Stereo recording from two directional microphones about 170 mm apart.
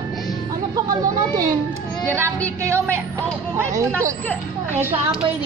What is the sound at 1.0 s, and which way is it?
Speech, 20° right (ahead or behind).